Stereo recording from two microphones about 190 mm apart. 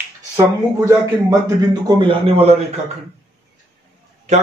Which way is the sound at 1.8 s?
30° right (ahead or behind).